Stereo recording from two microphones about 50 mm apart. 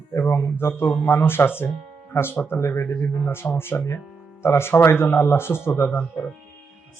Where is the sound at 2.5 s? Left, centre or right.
Left.